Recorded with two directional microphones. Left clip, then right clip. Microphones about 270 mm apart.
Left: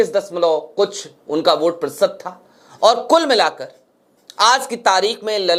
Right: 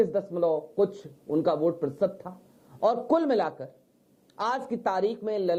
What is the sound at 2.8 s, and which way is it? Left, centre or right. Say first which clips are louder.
Speech: left 11 dB; centre.